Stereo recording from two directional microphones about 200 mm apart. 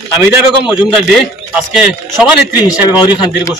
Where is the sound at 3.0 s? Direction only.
20° left (ahead or behind).